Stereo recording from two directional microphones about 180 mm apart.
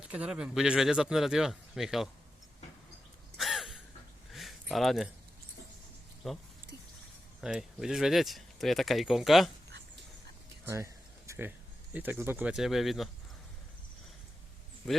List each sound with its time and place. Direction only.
0.1 s speech: 5° right (ahead or behind)
3.3 s gasp: centre (ahead or behind)
4.3 s a sound: centre (ahead or behind)
6.2 s speech: centre (ahead or behind)
7.4 s speech: 5° right (ahead or behind)
10.7 s a sound: 15° right (ahead or behind)
11.9 s speech: 10° right (ahead or behind)